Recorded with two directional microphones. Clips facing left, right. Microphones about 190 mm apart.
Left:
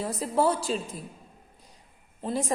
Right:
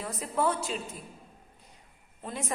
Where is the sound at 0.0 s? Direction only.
30° left (ahead or behind).